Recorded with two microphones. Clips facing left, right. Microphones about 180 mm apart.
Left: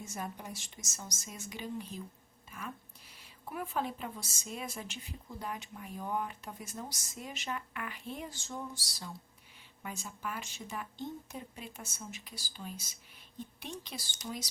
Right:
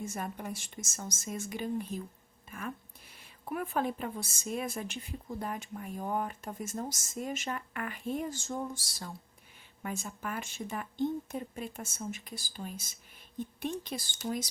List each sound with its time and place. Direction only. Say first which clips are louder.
0.0 s speech: right 4 dB; 55° right (ahead or behind)
2.5 s a sound: right 4 dB; 50° right (ahead or behind)
3.5 s speech: right 4 dB; 55° right (ahead or behind)